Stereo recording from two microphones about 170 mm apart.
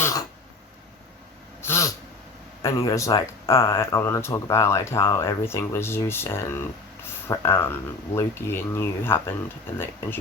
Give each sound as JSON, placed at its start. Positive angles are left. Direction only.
{"t": 0.0, "sound": "throat clearing", "side_deg": 20}
{"t": 1.6, "sound": "a sound", "side_deg": 15}
{"t": 2.6, "sound": "speech", "side_deg": 15}